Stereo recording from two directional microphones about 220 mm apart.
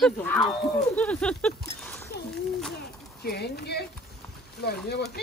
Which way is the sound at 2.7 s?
45° left (ahead or behind).